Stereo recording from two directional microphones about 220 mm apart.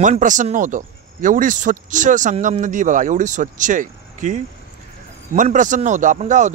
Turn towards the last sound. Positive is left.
turn(degrees=-35)  # may be behind; listen again after turning